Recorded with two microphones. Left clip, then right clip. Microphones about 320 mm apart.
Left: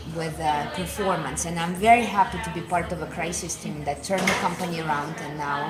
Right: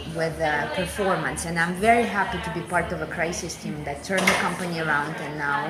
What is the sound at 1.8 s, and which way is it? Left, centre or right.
Speech, centre.